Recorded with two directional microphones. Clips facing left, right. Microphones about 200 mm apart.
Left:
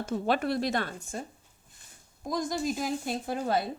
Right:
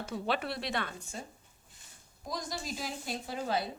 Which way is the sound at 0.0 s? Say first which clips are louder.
Left 6 dB; 45° left (ahead or behind).